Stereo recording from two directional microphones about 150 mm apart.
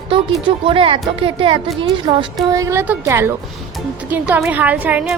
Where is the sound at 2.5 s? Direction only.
20° right (ahead or behind).